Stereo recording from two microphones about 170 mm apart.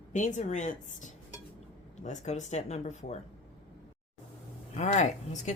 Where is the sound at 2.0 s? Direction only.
40° left (ahead or behind).